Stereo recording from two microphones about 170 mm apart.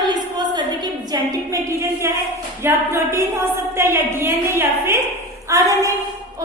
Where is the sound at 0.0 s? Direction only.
25° right (ahead or behind).